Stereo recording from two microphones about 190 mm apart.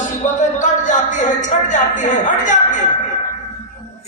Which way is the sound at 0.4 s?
40° left (ahead or behind).